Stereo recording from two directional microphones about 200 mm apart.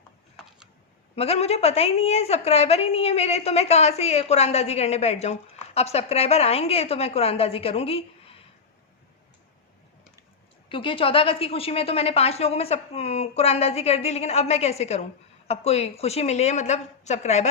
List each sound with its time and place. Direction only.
1.1 s a woman's voice: 30° left (ahead or behind)
10.7 s a woman's voice: 25° left (ahead or behind)